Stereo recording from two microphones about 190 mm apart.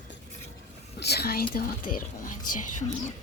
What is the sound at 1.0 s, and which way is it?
Speech, 55° left (ahead or behind).